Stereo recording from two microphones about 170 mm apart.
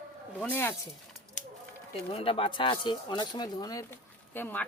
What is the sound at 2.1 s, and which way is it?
Speech, 30° left (ahead or behind).